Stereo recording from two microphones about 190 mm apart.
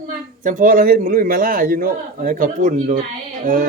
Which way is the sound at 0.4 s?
45° right (ahead or behind).